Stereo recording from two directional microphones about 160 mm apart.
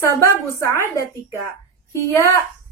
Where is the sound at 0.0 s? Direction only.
15° left (ahead or behind).